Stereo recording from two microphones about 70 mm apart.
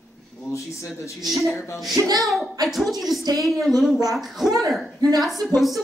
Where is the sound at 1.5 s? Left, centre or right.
Left.